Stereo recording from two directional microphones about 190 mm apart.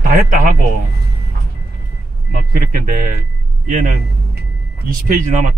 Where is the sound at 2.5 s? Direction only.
50° right (ahead or behind).